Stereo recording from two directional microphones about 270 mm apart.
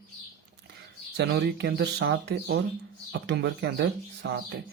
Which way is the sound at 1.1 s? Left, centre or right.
Right.